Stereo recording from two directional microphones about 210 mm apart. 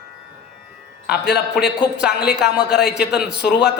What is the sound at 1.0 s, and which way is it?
Speech, 50° left (ahead or behind).